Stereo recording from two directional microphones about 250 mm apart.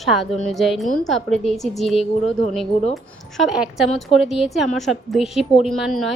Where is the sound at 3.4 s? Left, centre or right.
Centre.